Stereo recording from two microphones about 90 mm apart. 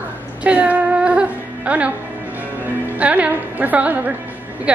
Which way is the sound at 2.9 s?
15° right (ahead or behind).